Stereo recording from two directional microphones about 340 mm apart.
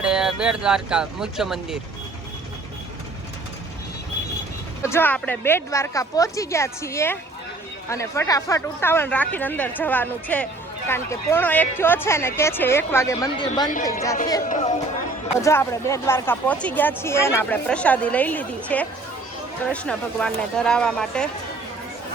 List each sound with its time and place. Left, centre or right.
0.0 s speech: centre
4.8 s speech: centre
15.4 s speech: centre